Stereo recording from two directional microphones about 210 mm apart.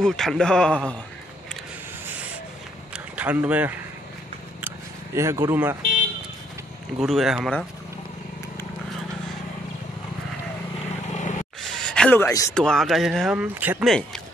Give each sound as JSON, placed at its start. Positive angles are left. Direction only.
{"t": 0.0, "sound": "speech", "side_deg": 0}
{"t": 2.9, "sound": "a sound", "side_deg": -5}
{"t": 4.6, "sound": "single-lens reflex camera", "side_deg": -10}
{"t": 7.0, "sound": "speech", "side_deg": 0}
{"t": 11.1, "sound": "vehicle", "side_deg": 35}
{"t": 11.8, "sound": "speech", "side_deg": 5}
{"t": 12.5, "sound": "speech", "side_deg": 5}